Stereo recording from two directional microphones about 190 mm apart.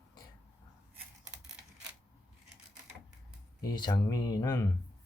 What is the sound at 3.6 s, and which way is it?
Speech, 20° left (ahead or behind).